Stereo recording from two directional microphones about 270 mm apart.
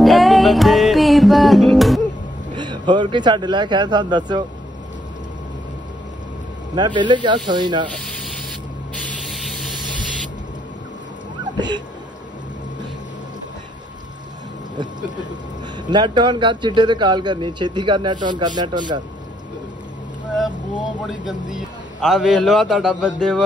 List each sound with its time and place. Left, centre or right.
0.0 s music: centre
2.5 s speech: centre
6.7 s speech: centre
8.9 s spray: centre
11.5 s speech: centre
15.9 s speech: centre
21.1 s a man's voice: centre